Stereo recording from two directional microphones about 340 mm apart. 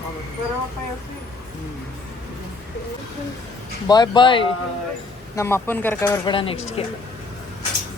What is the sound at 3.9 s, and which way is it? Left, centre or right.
Speech, centre.